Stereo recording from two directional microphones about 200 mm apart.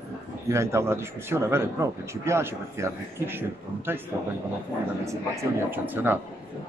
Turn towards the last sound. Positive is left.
turn(degrees=-10)  # may be behind; listen again after turning